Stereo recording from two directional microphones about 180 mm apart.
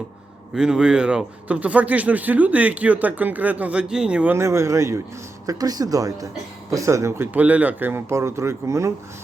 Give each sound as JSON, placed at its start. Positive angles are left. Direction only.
{"t": 0.5, "sound": "speech", "side_deg": -5}